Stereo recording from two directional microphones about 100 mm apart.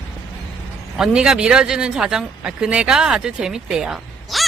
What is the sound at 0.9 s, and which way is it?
Speech, 5° right (ahead or behind).